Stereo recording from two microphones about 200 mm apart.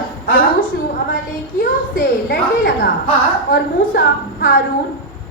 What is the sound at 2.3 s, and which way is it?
A man's voice, 50° left (ahead or behind).